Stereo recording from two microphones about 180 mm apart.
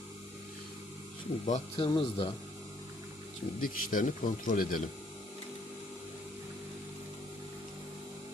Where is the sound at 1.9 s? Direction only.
25° left (ahead or behind).